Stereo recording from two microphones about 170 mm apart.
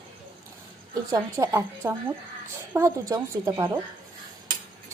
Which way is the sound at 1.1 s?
20° right (ahead or behind).